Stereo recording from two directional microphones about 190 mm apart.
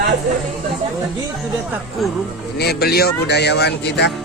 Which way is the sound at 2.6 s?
55° left (ahead or behind).